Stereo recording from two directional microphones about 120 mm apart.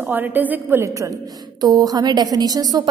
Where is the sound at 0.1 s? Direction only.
15° right (ahead or behind).